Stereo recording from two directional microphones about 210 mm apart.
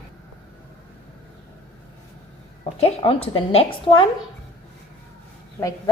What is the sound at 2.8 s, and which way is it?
A woman's voice, 25° left (ahead or behind).